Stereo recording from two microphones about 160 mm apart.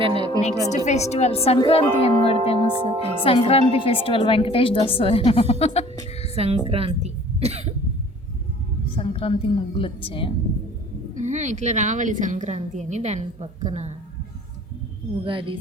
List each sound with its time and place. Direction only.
0.0 s a woman's voice: 30° right (ahead or behind)
0.9 s a woman's voice: 45° left (ahead or behind)
2.7 s a woman's voice: 40° right (ahead or behind)
3.5 s a woman's voice: 35° left (ahead or behind)
6.3 s a woman's voice: 40° right (ahead or behind)
9.0 s a woman's voice: 35° left (ahead or behind)
11.2 s a woman's voice: 50° right (ahead or behind)
15.2 s a woman's voice: 35° right (ahead or behind)